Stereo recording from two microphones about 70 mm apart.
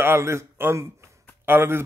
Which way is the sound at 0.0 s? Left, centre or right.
Right.